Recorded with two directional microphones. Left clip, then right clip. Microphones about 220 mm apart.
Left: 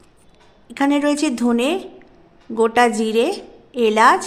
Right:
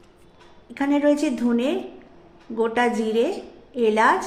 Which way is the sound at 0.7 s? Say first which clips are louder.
Left 2 dB; 35° left (ahead or behind).